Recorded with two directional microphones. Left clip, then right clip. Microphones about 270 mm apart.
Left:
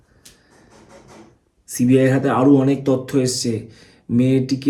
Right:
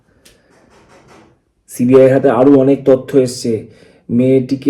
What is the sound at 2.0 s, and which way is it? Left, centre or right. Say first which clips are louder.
Speech: right 10 dB; centre.